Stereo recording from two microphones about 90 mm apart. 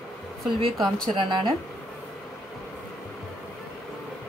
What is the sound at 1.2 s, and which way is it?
Speech, 60° right (ahead or behind).